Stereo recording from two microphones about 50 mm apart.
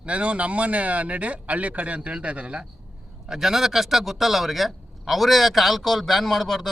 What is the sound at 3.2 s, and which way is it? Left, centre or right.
Speech, centre.